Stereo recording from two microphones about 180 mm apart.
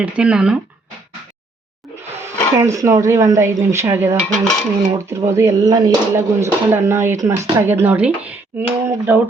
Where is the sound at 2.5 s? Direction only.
15° right (ahead or behind).